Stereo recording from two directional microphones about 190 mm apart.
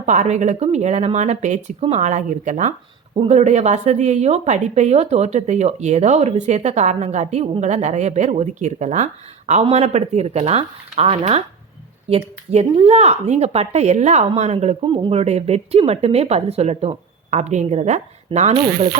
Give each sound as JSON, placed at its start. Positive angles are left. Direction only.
{"t": 0.0, "sound": "speech", "side_deg": -40}
{"t": 18.5, "sound": "speech", "side_deg": -25}